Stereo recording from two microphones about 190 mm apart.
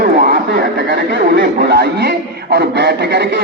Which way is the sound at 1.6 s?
55° right (ahead or behind).